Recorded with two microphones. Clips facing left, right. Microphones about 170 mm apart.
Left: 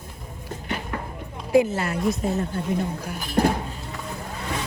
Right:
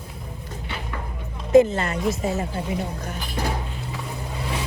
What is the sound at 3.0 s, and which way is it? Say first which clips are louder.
Speech: even; 10° left (ahead or behind).